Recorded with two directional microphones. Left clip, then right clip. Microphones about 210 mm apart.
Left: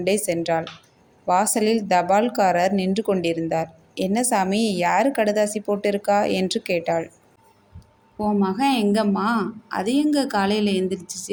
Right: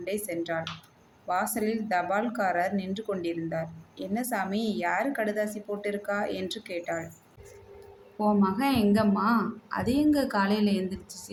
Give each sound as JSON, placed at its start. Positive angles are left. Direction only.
{"t": 0.0, "sound": "a woman's voice", "side_deg": 40}
{"t": 8.2, "sound": "speech", "side_deg": 20}